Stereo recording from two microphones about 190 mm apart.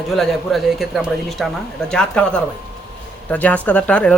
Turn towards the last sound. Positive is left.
turn(degrees=5)  # may be behind; listen again after turning